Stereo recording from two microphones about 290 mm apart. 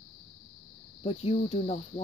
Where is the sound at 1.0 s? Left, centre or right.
Centre.